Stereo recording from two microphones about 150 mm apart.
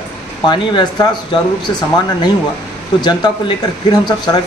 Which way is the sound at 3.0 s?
30° left (ahead or behind).